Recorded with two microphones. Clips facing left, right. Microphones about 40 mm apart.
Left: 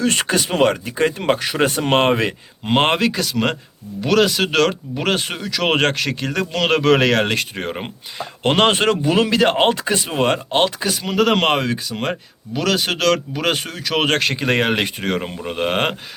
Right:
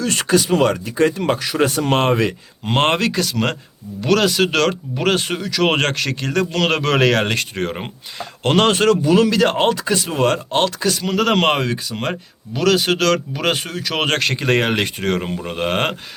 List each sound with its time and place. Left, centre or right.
0.0 s speech: left
2.6 s speech: centre
8.4 s speech: left; by 16.0 s centre